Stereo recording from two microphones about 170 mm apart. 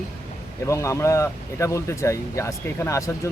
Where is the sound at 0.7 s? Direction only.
15° left (ahead or behind).